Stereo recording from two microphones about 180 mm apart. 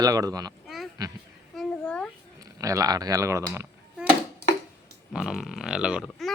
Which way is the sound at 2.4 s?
20° right (ahead or behind).